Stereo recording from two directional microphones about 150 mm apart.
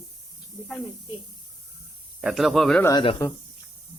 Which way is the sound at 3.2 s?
25° left (ahead or behind).